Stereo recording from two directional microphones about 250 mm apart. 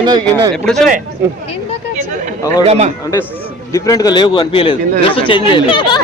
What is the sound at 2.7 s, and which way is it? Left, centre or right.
Speech, right.